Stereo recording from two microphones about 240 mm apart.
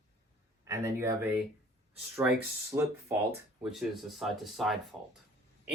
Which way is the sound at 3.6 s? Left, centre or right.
Centre.